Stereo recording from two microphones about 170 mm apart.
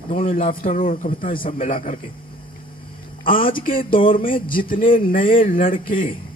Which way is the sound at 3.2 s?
55° left (ahead or behind).